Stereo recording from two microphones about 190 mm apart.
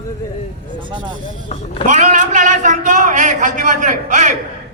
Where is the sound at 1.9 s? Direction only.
40° right (ahead or behind).